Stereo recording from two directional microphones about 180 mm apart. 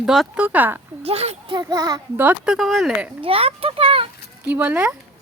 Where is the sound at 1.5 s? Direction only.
20° right (ahead or behind).